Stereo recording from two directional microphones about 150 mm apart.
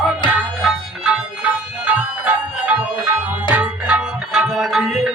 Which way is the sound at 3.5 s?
10° right (ahead or behind).